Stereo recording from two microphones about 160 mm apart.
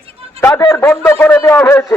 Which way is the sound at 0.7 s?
15° left (ahead or behind).